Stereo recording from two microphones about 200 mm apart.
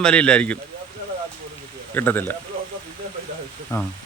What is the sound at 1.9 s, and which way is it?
Speech, 10° left (ahead or behind).